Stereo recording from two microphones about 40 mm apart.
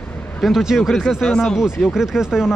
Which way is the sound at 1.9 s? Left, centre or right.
Centre.